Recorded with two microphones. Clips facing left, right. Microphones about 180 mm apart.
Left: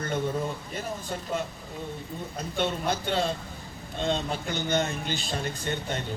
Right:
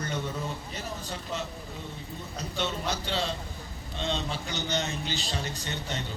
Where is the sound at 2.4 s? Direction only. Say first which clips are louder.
Left 4 dB; 50° left (ahead or behind).